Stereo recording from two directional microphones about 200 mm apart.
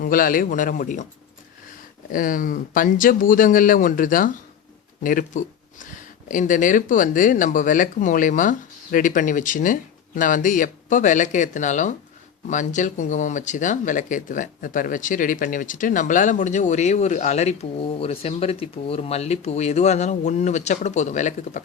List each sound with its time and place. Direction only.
0.0 s speech: 45° left (ahead or behind)
2.1 s speech: 45° left (ahead or behind)